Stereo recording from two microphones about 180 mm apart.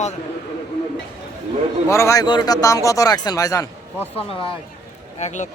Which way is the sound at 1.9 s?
15° left (ahead or behind).